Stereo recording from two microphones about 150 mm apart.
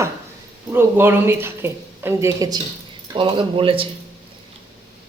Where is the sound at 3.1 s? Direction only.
35° right (ahead or behind).